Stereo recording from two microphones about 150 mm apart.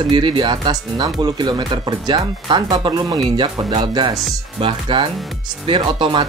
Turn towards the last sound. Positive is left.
turn(degrees=-35)  # may be behind; listen again after turning